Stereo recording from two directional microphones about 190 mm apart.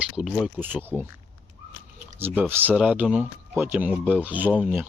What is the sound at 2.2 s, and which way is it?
Speech, 10° right (ahead or behind).